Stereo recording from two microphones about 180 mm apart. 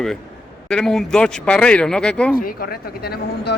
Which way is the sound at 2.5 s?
60° left (ahead or behind).